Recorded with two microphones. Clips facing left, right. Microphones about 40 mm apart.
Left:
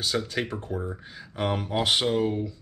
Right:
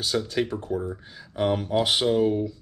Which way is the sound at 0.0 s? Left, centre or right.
Centre.